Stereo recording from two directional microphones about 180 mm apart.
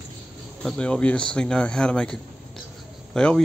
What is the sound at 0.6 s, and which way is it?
Speech, 5° left (ahead or behind).